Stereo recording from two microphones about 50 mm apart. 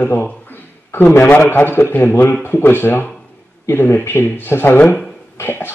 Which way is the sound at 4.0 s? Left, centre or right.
Left.